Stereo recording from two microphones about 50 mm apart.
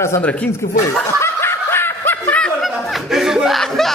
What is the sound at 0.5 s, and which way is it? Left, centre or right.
Snicker, left.